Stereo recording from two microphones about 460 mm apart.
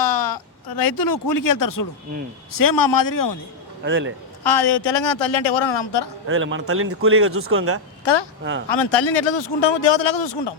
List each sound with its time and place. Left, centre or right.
0.0 s a sound: left
0.8 s speech: left
3.8 s a man's voice: right
4.4 s a man's voice: left
6.2 s a man's voice: right
8.0 s a man's voice: left